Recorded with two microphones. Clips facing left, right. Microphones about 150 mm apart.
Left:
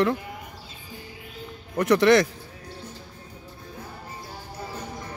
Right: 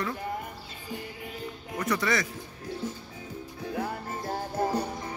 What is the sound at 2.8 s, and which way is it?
Music, 90° right.